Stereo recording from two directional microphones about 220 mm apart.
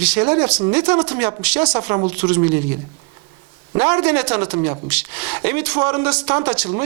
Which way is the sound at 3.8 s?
15° right (ahead or behind).